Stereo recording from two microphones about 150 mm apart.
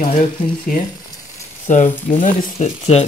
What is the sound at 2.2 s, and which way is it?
Speech, 45° left (ahead or behind).